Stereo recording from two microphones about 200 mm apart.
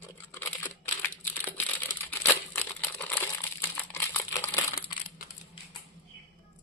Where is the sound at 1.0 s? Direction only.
10° left (ahead or behind).